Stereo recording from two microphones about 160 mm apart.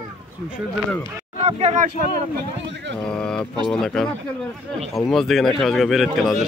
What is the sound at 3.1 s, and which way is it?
Speech, 5° left (ahead or behind).